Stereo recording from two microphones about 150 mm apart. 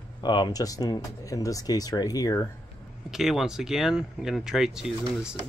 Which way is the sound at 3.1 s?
Centre (ahead or behind).